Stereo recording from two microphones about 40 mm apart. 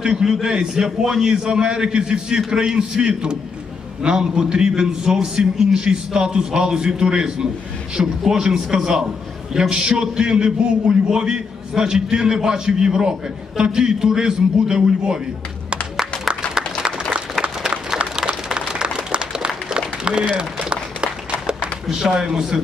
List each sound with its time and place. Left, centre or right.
0.0 s a man's voice: centre
16.0 s applause: centre
17.1 s a sound: centre
21.8 s speech: centre